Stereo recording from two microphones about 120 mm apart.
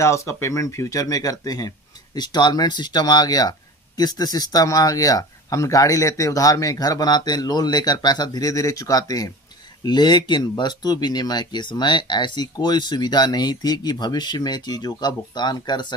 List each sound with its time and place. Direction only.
0.0 s speech: 25° left (ahead or behind)